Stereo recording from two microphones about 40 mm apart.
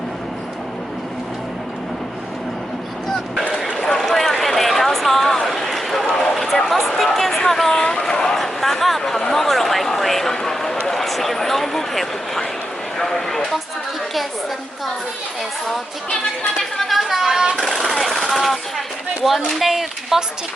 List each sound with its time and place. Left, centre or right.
3.8 s a sound: centre
6.3 s speech: centre
8.4 s speech: centre
16.4 s speech: centre
16.9 s speech: centre
17.6 s speech: centre